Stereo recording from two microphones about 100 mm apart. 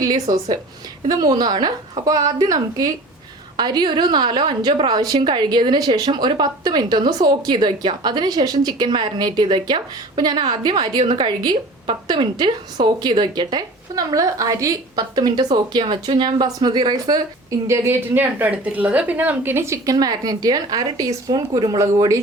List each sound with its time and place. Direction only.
0.0 s a woman's voice: 40° right (ahead or behind)
15.5 s a woman's voice: 60° right (ahead or behind); by 17.2 s 40° right (ahead or behind)
17.7 s a woman's voice: 20° right (ahead or behind)